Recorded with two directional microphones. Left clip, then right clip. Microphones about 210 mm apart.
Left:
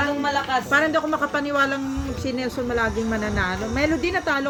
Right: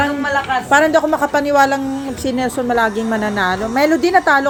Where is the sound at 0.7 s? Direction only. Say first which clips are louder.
Right 10 dB; 25° right (ahead or behind).